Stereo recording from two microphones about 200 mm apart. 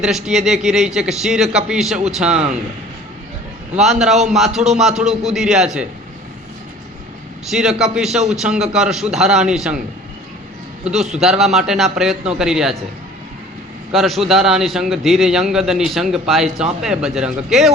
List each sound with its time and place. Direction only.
0.0 s a man's voice: centre (ahead or behind)
2.3 s a man's voice: 30° right (ahead or behind)
3.8 s a man's voice: centre (ahead or behind)
7.5 s a man's voice: centre (ahead or behind)
10.8 s a man's voice: centre (ahead or behind)
13.9 s a man's voice: centre (ahead or behind)